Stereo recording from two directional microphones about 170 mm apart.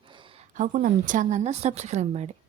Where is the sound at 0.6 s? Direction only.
50° right (ahead or behind).